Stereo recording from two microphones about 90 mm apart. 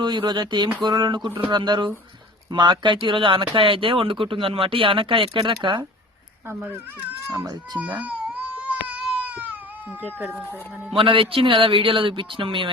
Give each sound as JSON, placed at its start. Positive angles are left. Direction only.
{"t": 0.0, "sound": "a sound", "side_deg": -60}
{"t": 2.5, "sound": "speech", "side_deg": -60}
{"t": 6.5, "sound": "speech", "side_deg": -25}
{"t": 7.3, "sound": "speech", "side_deg": -35}
{"t": 8.0, "sound": "baby cry", "side_deg": -15}
{"t": 10.9, "sound": "speech", "side_deg": -80}